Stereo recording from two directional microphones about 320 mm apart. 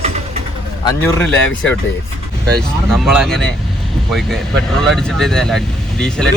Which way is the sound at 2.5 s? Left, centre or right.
Centre.